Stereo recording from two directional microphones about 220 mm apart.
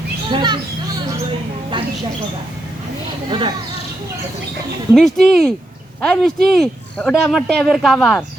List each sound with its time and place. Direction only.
0.3 s a sound: 20° right (ahead or behind)
3.2 s speech: 20° right (ahead or behind)
4.9 s speech: centre (ahead or behind)